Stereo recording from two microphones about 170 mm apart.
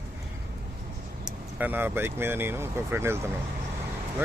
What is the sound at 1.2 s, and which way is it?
Speech, 10° right (ahead or behind).